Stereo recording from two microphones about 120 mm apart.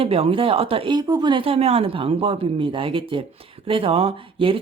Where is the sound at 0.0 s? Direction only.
55° right (ahead or behind).